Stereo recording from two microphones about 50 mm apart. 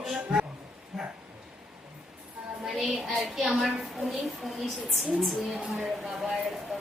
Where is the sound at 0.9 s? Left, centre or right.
Centre.